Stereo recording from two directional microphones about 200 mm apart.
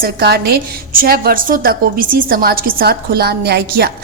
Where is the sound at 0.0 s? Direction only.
55° right (ahead or behind).